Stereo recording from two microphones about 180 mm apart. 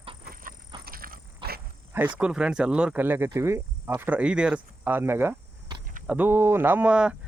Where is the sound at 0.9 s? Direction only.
55° right (ahead or behind).